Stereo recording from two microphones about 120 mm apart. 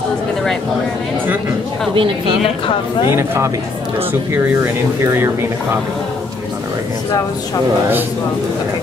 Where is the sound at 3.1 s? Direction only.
20° right (ahead or behind).